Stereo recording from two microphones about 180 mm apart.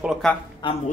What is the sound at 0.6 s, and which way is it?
Speech, 30° left (ahead or behind).